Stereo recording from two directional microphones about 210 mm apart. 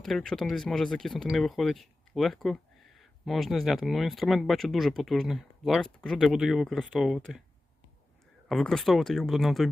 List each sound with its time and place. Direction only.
0.0 s speech: centre (ahead or behind)
8.4 s speech: centre (ahead or behind)